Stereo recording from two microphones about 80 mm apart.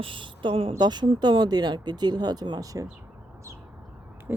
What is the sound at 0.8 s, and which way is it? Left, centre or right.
Speech, right.